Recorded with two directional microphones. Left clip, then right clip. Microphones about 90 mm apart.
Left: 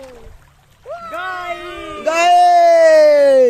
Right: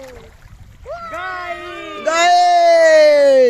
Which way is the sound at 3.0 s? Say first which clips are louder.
Even; 30° left (ahead or behind).